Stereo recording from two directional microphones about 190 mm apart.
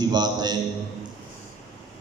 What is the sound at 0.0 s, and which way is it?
Speech, 20° right (ahead or behind).